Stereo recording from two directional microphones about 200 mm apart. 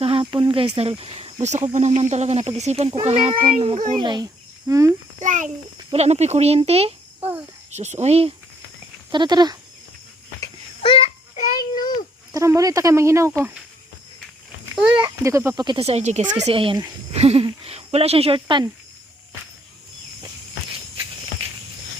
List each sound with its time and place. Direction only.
0.0 s speech: 25° right (ahead or behind)
3.3 s a child's voice: 45° right (ahead or behind)
3.6 s speech: 25° right (ahead or behind)
5.2 s speech: 40° right (ahead or behind)
9.1 s speech: 20° right (ahead or behind)
10.4 s babbling: 25° left (ahead or behind)
12.3 s speech: 15° right (ahead or behind)
14.9 s speech: 15° right (ahead or behind)